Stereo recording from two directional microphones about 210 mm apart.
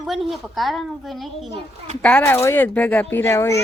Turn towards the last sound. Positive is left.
turn(degrees=10)  # may be behind; listen again after turning